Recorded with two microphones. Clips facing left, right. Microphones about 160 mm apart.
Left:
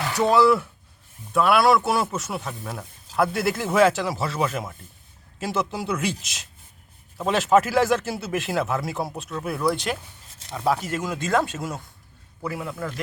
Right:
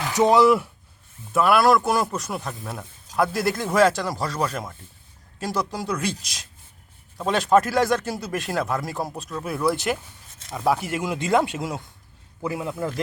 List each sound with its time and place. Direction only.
0.2 s speech: 15° right (ahead or behind)
1.3 s a man's voice: centre (ahead or behind); by 12.9 s 20° right (ahead or behind)